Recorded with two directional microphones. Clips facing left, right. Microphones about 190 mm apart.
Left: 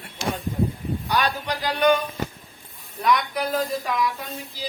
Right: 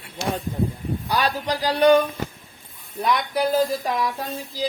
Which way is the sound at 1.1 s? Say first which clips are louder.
Right 2 dB; 30° right (ahead or behind).